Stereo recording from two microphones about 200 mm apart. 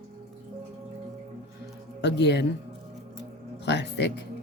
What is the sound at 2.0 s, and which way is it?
Speech, 60° left (ahead or behind).